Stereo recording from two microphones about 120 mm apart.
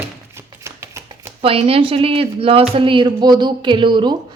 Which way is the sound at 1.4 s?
50° right (ahead or behind).